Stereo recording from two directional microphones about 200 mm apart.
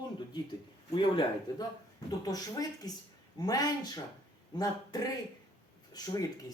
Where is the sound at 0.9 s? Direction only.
20° left (ahead or behind).